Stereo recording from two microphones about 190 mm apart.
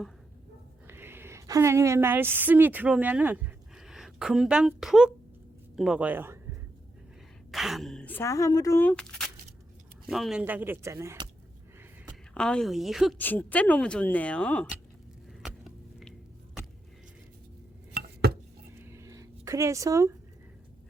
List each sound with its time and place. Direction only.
0.9 s a woman's voice: 10° right (ahead or behind)
7.5 s speech: centre (ahead or behind)
12.3 s a woman's voice: 5° left (ahead or behind)
13.1 s speech: 10° left (ahead or behind)
15.4 s vehicle: centre (ahead or behind)
17.9 s a sound: 55° right (ahead or behind)
18.7 s a sound: 15° right (ahead or behind)